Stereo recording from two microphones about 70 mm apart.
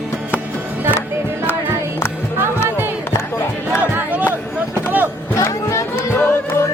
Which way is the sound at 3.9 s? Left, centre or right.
Right.